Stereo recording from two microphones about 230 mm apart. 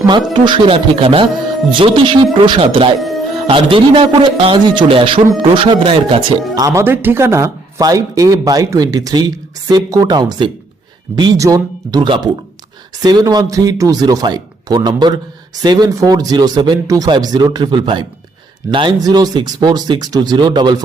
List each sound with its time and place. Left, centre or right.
0.3 s a man's voice: right